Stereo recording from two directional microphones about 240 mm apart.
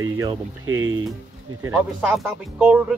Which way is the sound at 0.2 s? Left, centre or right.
Centre.